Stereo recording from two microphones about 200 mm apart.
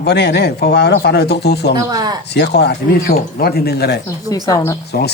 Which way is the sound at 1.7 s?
20° right (ahead or behind).